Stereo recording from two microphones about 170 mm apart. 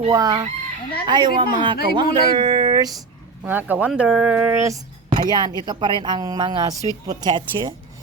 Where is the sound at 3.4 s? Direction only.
10° right (ahead or behind).